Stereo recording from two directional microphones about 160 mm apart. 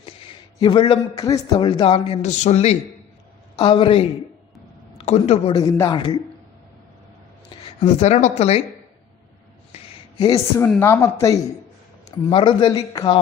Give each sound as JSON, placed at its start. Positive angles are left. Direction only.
{"t": 0.6, "sound": "a man's voice", "side_deg": 30}
{"t": 2.2, "sound": "a man's voice", "side_deg": 45}
{"t": 5.5, "sound": "a man's voice", "side_deg": 20}
{"t": 7.8, "sound": "speech", "side_deg": 40}
{"t": 9.7, "sound": "a sound", "side_deg": 40}
{"t": 10.2, "sound": "a man's voice", "side_deg": 25}
{"t": 10.8, "sound": "speech", "side_deg": 15}
{"t": 12.3, "sound": "a man's voice", "side_deg": 35}